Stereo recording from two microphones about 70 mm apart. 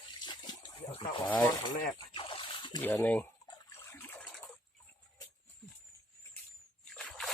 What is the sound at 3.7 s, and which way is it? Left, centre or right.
Water, left.